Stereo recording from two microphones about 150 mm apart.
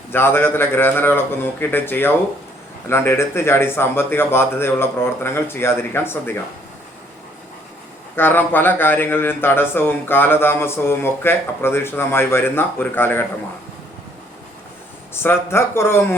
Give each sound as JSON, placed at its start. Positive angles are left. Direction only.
{"t": 0.1, "sound": "speech", "side_deg": 15}
{"t": 8.1, "sound": "speech", "side_deg": 15}
{"t": 15.1, "sound": "speech", "side_deg": 15}